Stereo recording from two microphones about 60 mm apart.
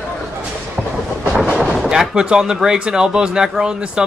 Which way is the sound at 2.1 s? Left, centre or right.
Centre.